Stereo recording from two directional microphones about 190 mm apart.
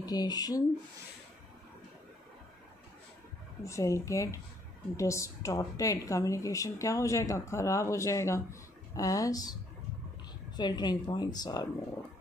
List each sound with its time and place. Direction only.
0.0 s a woman's voice: 20° left (ahead or behind)
3.6 s a woman's voice: 15° left (ahead or behind)